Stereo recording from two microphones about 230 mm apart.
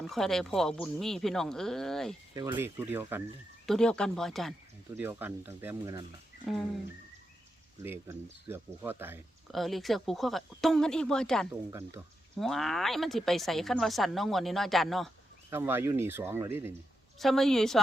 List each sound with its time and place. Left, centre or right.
0.0 s a woman's voice: centre
2.3 s speech: centre
3.7 s a woman's voice: centre
4.9 s speech: centre
6.4 s speech: centre
7.8 s speech: centre
9.5 s a woman's voice: centre
17.2 s a woman's voice: centre